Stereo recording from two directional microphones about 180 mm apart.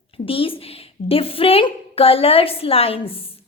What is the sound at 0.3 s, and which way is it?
A woman's voice, 30° left (ahead or behind).